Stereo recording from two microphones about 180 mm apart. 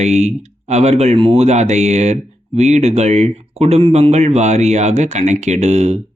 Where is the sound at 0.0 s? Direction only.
40° right (ahead or behind).